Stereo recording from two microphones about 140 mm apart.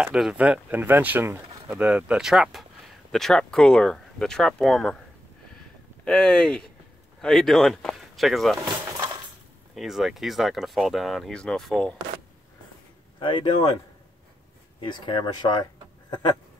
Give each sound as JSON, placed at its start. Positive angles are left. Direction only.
{"t": 0.0, "sound": "speech", "side_deg": -5}
{"t": 6.0, "sound": "speech", "side_deg": 5}
{"t": 8.6, "sound": "a sound", "side_deg": -25}
{"t": 9.8, "sound": "speech", "side_deg": 0}
{"t": 13.2, "sound": "speech", "side_deg": 35}
{"t": 14.8, "sound": "speech", "side_deg": 35}